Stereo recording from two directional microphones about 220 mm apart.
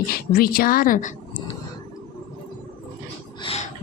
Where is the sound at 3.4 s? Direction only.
25° left (ahead or behind).